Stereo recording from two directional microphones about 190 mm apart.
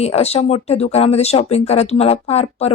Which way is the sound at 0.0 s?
35° left (ahead or behind).